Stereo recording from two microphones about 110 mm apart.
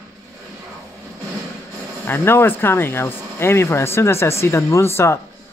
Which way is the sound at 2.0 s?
20° left (ahead or behind).